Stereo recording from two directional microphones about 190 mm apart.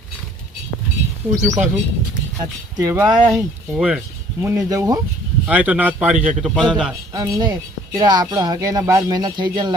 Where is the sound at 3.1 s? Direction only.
Centre (ahead or behind).